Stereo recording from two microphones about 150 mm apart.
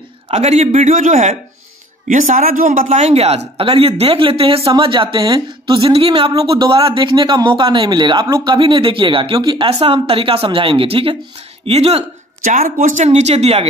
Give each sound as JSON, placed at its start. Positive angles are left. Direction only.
{"t": 0.3, "sound": "a man's voice", "side_deg": -50}
{"t": 3.0, "sound": "a woman's voice", "side_deg": -45}
{"t": 12.4, "sound": "speech", "side_deg": -55}